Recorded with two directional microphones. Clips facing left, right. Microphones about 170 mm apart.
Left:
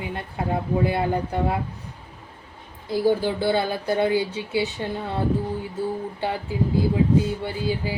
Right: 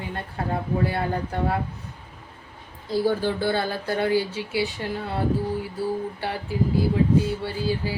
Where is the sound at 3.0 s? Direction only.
10° left (ahead or behind).